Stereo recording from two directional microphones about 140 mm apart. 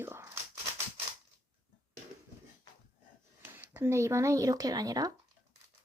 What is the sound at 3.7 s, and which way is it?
Speech, 20° right (ahead or behind).